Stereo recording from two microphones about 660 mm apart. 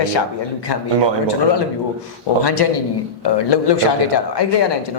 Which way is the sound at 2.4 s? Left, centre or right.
Left.